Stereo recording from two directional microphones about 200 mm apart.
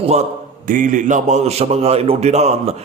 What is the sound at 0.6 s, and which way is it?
A man's voice, 40° right (ahead or behind).